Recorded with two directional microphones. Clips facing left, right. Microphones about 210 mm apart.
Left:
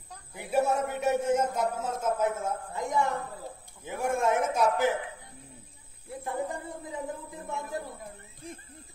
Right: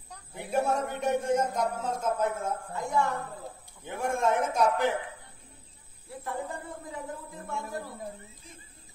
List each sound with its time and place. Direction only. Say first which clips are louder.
0.1 s a man's voice: left 1 dB; centre (ahead or behind)
2.7 s a woman's voice: even; 20° left (ahead or behind)
3.8 s a man's voice: left 1 dB; 10° left (ahead or behind)
6.2 s a woman's voice: left 2 dB; 20° left (ahead or behind)